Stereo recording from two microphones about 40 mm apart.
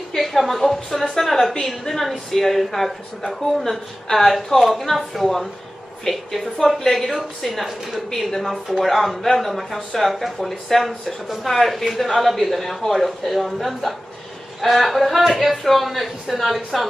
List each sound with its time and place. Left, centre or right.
0.1 s a woman's voice: centre